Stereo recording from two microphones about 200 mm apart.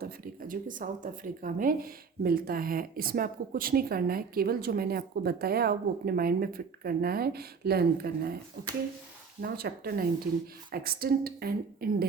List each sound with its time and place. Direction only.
0.0 s speech: 45° right (ahead or behind)